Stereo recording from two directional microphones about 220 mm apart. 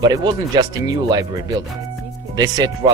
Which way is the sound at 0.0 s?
20° right (ahead or behind).